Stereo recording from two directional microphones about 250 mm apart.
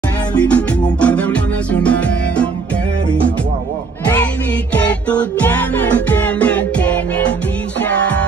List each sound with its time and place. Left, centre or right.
0.4 s music: centre
4.7 s music: centre